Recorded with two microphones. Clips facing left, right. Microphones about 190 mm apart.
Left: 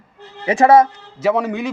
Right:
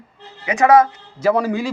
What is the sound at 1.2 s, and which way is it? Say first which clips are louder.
Speech: right 1 dB; centre (ahead or behind).